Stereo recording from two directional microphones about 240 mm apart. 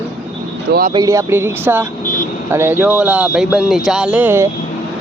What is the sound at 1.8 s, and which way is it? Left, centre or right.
Vehicle, left.